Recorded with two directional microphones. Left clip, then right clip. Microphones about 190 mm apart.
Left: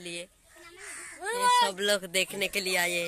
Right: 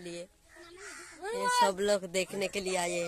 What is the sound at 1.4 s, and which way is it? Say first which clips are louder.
Speech: left 4 dB; 30° right (ahead or behind).